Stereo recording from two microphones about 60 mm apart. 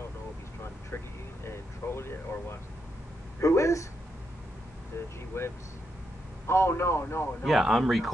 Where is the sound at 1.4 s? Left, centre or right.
Left.